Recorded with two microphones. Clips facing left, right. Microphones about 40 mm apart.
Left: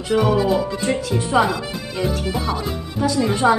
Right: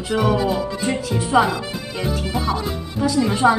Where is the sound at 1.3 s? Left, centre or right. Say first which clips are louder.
Right 1 dB; centre.